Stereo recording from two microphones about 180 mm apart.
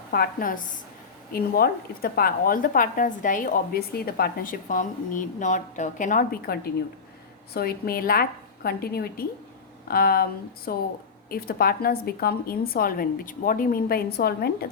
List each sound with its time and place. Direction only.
0.1 s a woman's voice: 55° left (ahead or behind)